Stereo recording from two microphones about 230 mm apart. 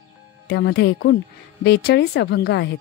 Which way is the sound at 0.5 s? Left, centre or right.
Left.